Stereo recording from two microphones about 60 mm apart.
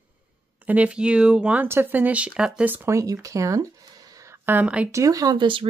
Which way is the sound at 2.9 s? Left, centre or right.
Right.